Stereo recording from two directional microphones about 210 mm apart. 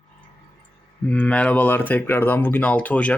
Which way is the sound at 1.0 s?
5° left (ahead or behind).